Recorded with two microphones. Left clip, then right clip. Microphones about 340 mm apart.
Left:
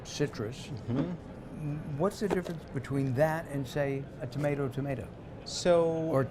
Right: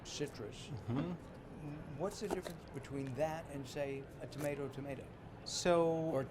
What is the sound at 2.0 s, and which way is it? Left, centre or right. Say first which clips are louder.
Speech: left 10 dB; left.